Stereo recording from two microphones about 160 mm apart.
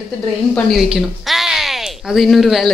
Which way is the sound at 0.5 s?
Centre (ahead or behind).